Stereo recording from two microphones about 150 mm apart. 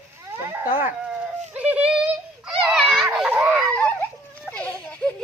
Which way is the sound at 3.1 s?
10° right (ahead or behind).